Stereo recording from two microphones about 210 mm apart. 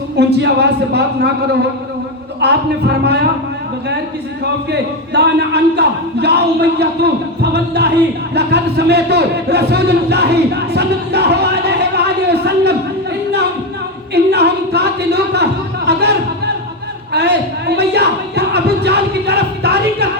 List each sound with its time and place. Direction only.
0.2 s speech: 50° right (ahead or behind)
2.4 s speech: 50° right (ahead or behind)
4.7 s speech: 50° right (ahead or behind)
14.1 s a sound: 50° right (ahead or behind)
17.1 s speech: 50° right (ahead or behind)